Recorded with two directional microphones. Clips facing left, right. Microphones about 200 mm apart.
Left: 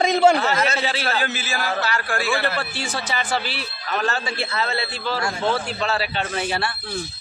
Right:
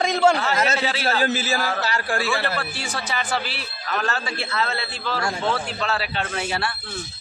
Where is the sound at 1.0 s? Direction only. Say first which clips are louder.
Right 3 dB; 40° right (ahead or behind).